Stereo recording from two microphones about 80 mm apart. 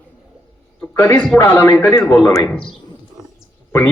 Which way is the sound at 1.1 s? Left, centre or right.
Centre.